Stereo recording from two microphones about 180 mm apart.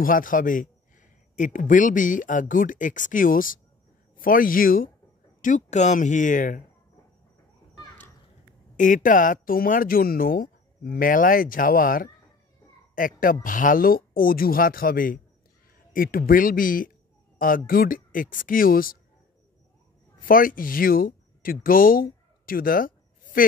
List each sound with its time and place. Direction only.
0.0 s speech: 50° left (ahead or behind)
7.7 s children playing: 20° left (ahead or behind)
8.7 s speech: 45° left (ahead or behind)
20.2 s speech: 50° left (ahead or behind)